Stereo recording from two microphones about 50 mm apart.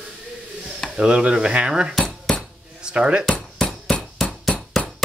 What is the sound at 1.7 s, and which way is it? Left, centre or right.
Cutlery, centre.